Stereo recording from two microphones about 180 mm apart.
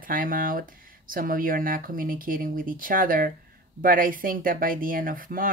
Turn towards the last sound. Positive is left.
turn(degrees=-50)  # may be behind; listen again after turning